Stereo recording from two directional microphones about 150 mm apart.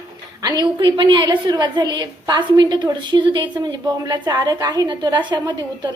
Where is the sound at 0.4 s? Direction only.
25° right (ahead or behind).